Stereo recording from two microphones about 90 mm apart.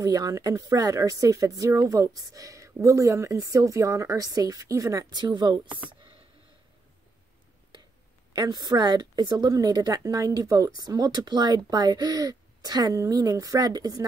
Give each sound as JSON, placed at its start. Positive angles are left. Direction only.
{"t": 0.0, "sound": "speech", "side_deg": -40}
{"t": 5.1, "sound": "speech", "side_deg": -50}
{"t": 8.3, "sound": "speech", "side_deg": -50}